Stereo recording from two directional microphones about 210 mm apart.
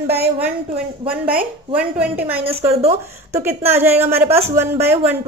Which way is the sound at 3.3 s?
10° right (ahead or behind).